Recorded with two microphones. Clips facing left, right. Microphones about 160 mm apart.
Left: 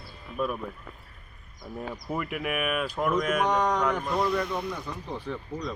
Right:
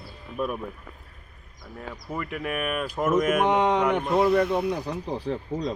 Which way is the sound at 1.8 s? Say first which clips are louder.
Left 1 dB; 15° left (ahead or behind).